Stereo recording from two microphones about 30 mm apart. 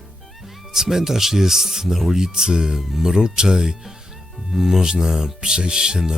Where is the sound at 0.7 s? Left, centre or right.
Centre.